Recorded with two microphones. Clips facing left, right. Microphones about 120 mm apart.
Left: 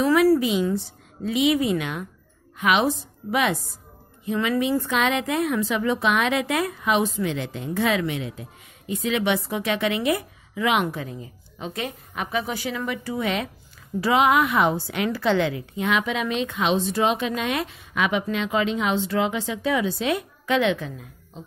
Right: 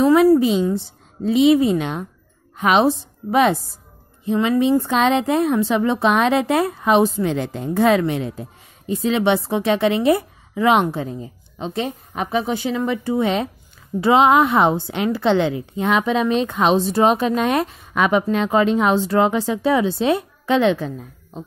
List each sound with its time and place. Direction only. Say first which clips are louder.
0.0 s a woman's voice: right 5 dB; 25° right (ahead or behind)